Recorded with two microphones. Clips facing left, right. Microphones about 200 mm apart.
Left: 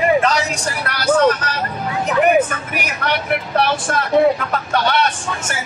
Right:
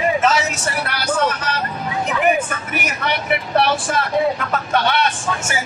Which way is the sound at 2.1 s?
55° left (ahead or behind).